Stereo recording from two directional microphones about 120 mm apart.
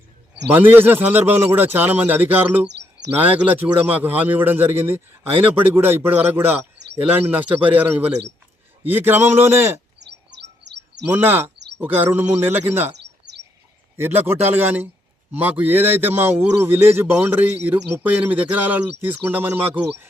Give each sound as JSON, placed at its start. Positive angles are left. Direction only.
{"t": 0.5, "sound": "a man's voice", "side_deg": -15}
{"t": 11.1, "sound": "a man's voice", "side_deg": -15}
{"t": 13.9, "sound": "a man's voice", "side_deg": -20}